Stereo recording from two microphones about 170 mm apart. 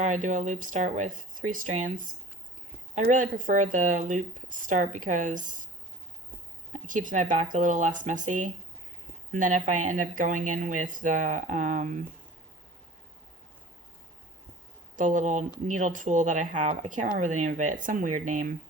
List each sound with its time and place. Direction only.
0.0 s speech: 45° right (ahead or behind)
6.7 s a woman's voice: 50° right (ahead or behind)
14.9 s speech: 50° right (ahead or behind)